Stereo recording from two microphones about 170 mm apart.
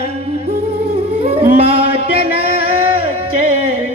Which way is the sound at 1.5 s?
35° right (ahead or behind).